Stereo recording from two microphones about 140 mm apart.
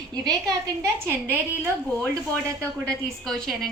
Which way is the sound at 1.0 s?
15° right (ahead or behind).